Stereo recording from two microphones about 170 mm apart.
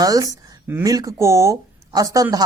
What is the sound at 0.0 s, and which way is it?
Speech, 20° right (ahead or behind).